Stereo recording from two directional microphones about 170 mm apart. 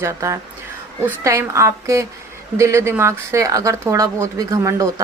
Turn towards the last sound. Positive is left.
turn(degrees=-20)  # may be behind; listen again after turning